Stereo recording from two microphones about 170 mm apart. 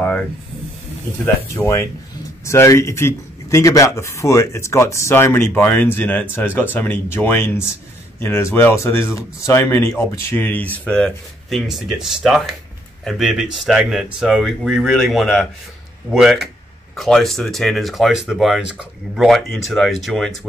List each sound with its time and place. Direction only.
1.2 s speech: 15° left (ahead or behind); by 20.3 s centre (ahead or behind)